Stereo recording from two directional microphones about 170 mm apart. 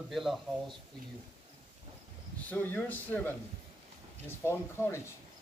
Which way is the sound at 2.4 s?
10° left (ahead or behind).